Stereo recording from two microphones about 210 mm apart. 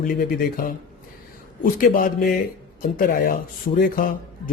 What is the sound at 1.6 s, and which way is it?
Speech, 40° left (ahead or behind).